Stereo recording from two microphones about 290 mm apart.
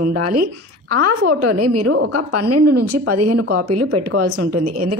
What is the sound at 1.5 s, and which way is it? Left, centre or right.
A woman's voice, right.